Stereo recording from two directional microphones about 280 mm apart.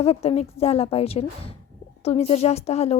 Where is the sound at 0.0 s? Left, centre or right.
Left.